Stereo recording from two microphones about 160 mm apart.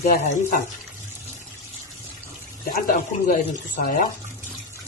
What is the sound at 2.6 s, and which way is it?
Speech, 65° left (ahead or behind).